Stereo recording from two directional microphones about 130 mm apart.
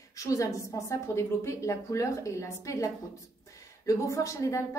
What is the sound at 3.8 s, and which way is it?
Speech, 25° left (ahead or behind).